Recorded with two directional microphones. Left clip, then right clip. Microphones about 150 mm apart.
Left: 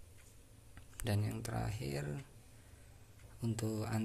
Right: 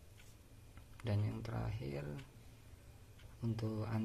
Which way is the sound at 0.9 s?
20° left (ahead or behind).